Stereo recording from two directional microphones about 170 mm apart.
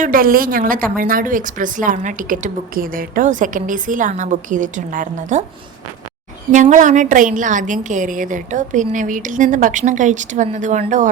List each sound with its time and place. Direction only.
0.0 s a woman's voice: 55° right (ahead or behind)
6.5 s a woman's voice: 50° right (ahead or behind)